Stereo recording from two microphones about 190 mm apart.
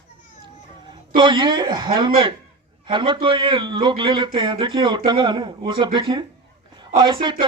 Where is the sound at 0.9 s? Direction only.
25° right (ahead or behind).